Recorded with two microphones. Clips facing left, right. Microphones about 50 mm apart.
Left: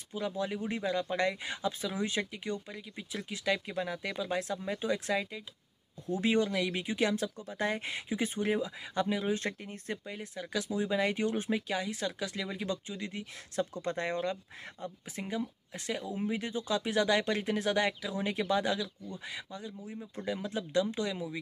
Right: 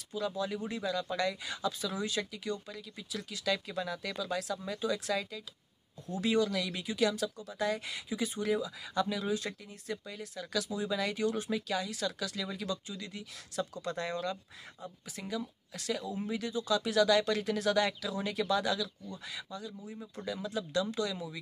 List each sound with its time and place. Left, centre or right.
0.1 s speech: left
9.4 s speech: left
10.0 s speech: left